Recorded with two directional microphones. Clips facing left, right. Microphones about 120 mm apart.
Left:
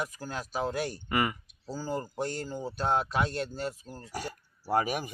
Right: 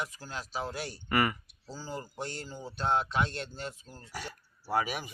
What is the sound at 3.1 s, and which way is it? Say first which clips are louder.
Speech: left 2 dB; 40° left (ahead or behind).